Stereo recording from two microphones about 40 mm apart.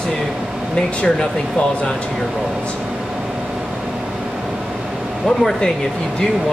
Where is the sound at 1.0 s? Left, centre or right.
Left.